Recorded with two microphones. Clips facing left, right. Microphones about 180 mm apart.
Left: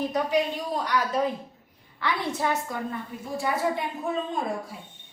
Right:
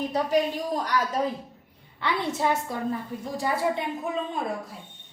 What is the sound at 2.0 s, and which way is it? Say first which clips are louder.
Speech: right 1 dB; 25° right (ahead or behind).